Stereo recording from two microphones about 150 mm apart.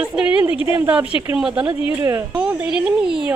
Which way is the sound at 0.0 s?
5° right (ahead or behind).